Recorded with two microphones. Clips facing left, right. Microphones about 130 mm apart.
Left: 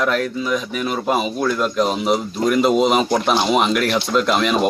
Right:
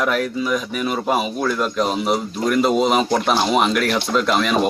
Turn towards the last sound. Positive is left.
turn(degrees=0)  # may be behind; listen again after turning